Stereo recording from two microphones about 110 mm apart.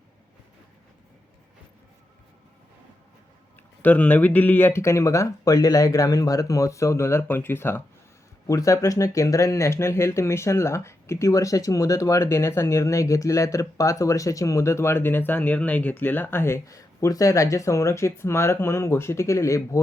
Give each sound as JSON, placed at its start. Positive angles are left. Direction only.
{"t": 3.8, "sound": "speech", "side_deg": 15}
{"t": 8.4, "sound": "speech", "side_deg": 30}